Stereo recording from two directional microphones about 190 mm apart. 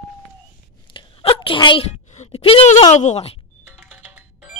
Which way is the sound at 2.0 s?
35° left (ahead or behind).